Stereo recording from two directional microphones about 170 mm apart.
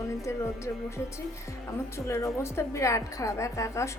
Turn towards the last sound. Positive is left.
turn(degrees=15)  # may be behind; listen again after turning